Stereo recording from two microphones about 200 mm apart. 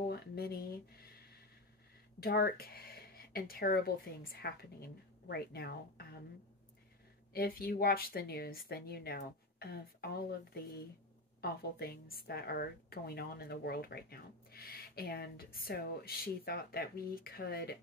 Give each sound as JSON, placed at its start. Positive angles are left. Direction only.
{"t": 0.1, "sound": "a sound", "side_deg": 50}
{"t": 2.1, "sound": "a woman's voice", "side_deg": 50}
{"t": 7.3, "sound": "a woman's voice", "side_deg": 50}